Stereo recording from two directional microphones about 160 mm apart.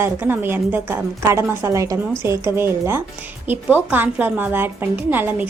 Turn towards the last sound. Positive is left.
turn(degrees=-10)  # may be behind; listen again after turning